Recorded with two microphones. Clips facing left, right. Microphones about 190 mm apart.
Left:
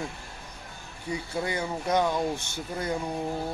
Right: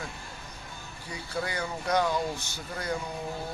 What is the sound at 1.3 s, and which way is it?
Speech, 25° left (ahead or behind).